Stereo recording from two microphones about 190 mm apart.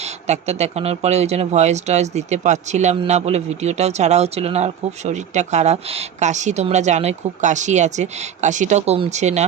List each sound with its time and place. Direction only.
0.0 s speech: 35° right (ahead or behind)